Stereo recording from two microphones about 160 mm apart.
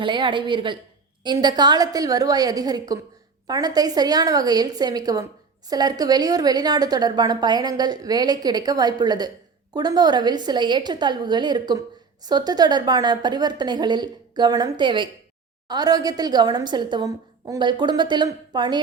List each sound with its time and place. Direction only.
0.0 s a woman's voice: 30° right (ahead or behind)